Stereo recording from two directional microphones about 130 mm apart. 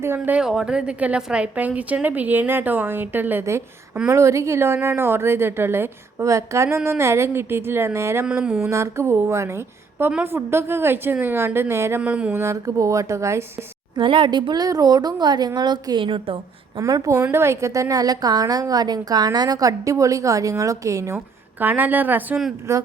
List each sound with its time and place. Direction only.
0.0 s a woman's voice: 20° right (ahead or behind)
0.3 s a woman's voice: 5° right (ahead or behind)
8.4 s a sound: 5° right (ahead or behind)
8.7 s a woman's voice: 20° right (ahead or behind)
10.1 s a woman's voice: 10° right (ahead or behind)
10.3 s a woman's voice: 20° right (ahead or behind)
12.4 s a woman's voice: 25° right (ahead or behind)
14.0 s a woman's voice: 40° right (ahead or behind)
16.7 s a woman's voice: 25° right (ahead or behind)
21.6 s a woman's voice: 15° right (ahead or behind)